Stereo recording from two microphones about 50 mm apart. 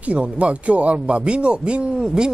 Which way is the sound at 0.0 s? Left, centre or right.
Right.